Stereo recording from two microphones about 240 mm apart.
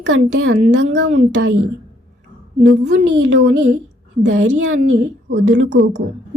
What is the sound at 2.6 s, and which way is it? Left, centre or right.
A woman's voice, right.